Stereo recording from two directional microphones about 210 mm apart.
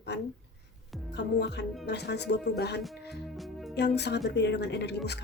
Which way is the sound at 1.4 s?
55° left (ahead or behind).